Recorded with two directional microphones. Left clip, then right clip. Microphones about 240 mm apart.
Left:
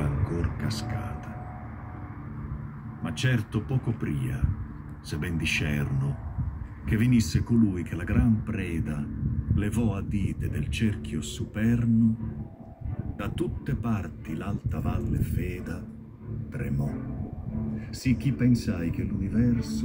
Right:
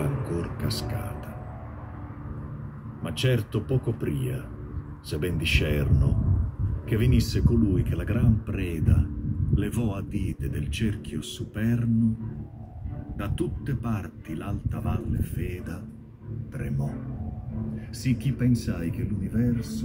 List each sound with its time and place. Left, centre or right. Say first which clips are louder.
0.0 s music: right 2 dB; right
3.0 s speech: right 3 dB; right
6.9 s speech: left 1 dB; centre
13.2 s speech: right 1 dB; centre